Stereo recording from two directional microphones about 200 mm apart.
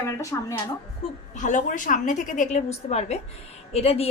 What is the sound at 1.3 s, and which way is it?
A woman's voice, 40° left (ahead or behind).